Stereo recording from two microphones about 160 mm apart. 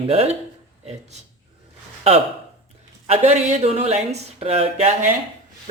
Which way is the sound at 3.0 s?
45° right (ahead or behind).